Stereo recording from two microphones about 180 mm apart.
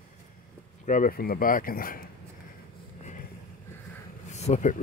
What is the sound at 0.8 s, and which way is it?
Speech, 45° left (ahead or behind).